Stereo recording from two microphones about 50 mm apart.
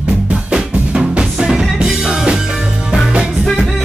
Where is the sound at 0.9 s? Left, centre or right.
Centre.